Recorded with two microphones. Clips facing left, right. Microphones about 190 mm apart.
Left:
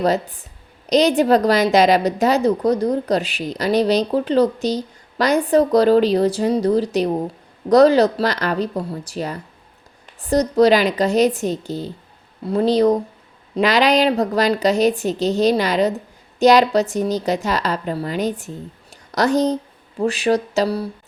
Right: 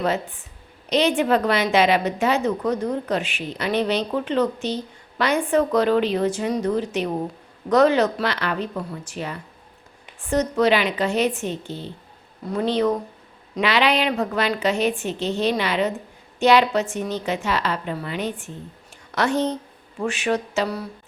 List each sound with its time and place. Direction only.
0.0 s a woman's voice: 40° left (ahead or behind)